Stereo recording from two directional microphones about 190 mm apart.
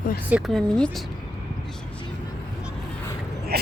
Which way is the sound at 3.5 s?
55° right (ahead or behind).